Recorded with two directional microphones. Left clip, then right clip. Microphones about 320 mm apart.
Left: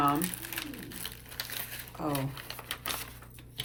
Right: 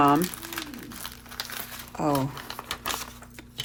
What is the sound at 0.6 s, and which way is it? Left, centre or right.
Crumpling, centre.